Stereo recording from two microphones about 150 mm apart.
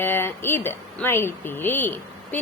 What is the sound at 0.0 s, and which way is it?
A woman's voice, 15° left (ahead or behind).